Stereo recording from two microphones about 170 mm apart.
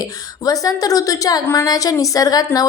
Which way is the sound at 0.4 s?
20° left (ahead or behind).